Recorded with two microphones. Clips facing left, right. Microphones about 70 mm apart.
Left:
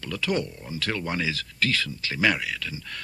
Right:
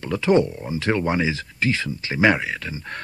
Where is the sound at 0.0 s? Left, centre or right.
Right.